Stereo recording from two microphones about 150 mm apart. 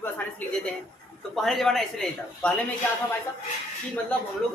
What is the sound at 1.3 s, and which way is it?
Speech, centre (ahead or behind).